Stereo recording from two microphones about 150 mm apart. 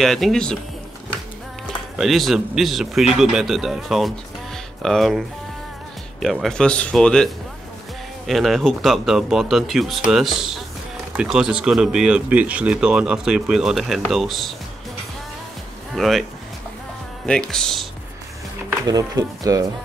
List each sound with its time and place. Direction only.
0.0 s speech: centre (ahead or behind)
2.0 s speech: centre (ahead or behind)
15.9 s speech: centre (ahead or behind)
17.3 s speech: 5° left (ahead or behind)
18.9 s speech: 25° right (ahead or behind)